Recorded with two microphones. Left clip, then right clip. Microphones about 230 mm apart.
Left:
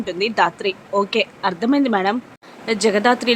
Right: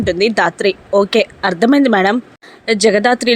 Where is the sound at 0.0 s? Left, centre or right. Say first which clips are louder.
Right 5 dB; centre.